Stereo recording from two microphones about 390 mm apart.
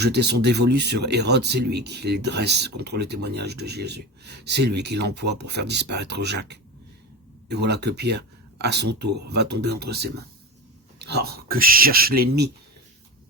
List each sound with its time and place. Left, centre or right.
0.0 s speech: right
9.0 s speech: right
9.3 s speech: right